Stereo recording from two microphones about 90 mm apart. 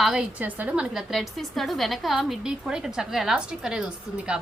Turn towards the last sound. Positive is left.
turn(degrees=-10)  # may be behind; listen again after turning